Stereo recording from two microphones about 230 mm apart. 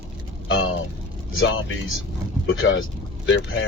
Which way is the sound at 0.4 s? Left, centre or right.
Left.